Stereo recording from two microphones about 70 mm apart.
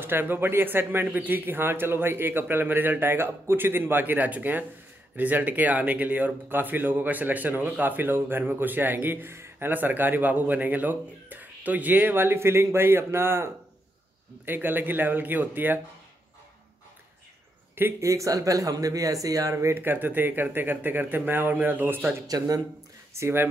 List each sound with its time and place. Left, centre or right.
0.0 s speech: right
18.0 s speech: right
19.7 s speech: right
22.3 s speech: right
23.1 s speech: right